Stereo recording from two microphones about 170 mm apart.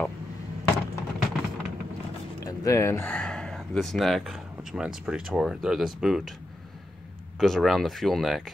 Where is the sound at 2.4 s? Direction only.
20° left (ahead or behind).